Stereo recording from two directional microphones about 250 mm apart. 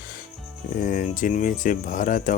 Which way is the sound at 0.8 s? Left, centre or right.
Left.